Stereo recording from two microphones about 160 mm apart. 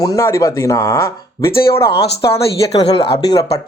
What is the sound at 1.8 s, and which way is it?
Speech, 90° left.